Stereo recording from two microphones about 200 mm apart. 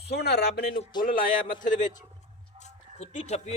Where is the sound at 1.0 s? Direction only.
45° left (ahead or behind).